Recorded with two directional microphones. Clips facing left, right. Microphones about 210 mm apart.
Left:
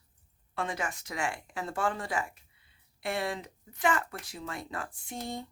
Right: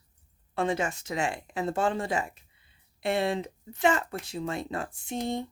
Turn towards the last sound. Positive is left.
turn(degrees=-25)  # may be behind; listen again after turning